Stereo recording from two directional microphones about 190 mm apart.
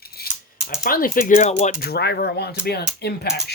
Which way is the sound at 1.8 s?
55° left (ahead or behind).